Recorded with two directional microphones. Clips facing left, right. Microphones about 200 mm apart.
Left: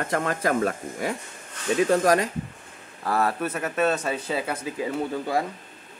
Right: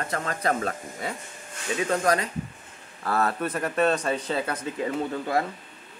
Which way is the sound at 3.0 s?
10° left (ahead or behind).